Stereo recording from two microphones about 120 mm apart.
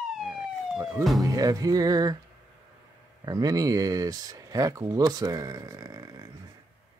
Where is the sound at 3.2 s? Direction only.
30° right (ahead or behind).